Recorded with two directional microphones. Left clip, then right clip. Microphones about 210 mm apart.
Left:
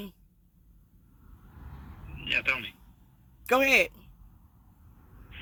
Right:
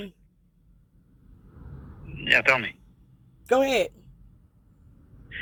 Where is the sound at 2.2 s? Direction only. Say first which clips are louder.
Right 8 dB; 15° right (ahead or behind).